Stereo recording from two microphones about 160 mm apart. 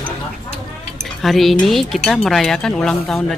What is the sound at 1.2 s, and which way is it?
Speech, centre (ahead or behind).